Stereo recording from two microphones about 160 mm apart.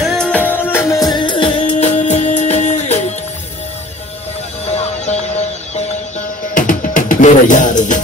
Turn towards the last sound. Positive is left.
turn(degrees=50)  # may be behind; listen again after turning